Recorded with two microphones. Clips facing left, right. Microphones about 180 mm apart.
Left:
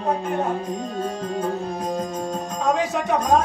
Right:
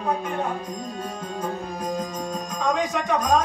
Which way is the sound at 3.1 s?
25° left (ahead or behind).